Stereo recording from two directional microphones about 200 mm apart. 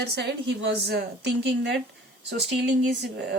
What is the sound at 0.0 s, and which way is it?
Speech, 55° right (ahead or behind).